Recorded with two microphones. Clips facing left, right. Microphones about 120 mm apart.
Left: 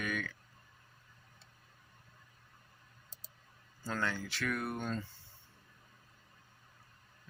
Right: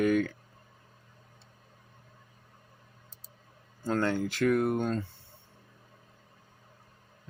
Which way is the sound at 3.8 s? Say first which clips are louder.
Right 9 dB; 50° right (ahead or behind).